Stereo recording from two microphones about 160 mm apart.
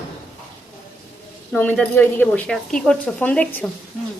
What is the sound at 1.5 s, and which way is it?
Speech, 10° left (ahead or behind).